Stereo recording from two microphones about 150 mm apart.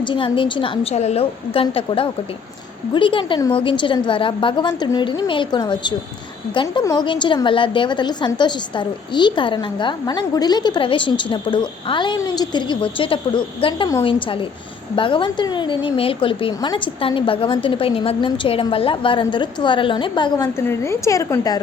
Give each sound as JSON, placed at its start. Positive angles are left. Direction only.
{"t": 0.0, "sound": "a woman's voice", "side_deg": 35}
{"t": 20.7, "sound": "a woman's voice", "side_deg": 20}